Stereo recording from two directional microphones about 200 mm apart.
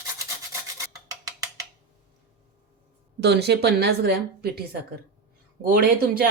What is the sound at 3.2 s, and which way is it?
A woman's voice, 55° right (ahead or behind).